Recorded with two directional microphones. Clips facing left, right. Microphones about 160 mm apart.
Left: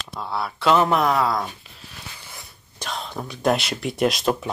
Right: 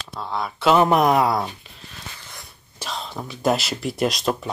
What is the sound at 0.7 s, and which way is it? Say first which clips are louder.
Speech: right 3 dB; 15° right (ahead or behind).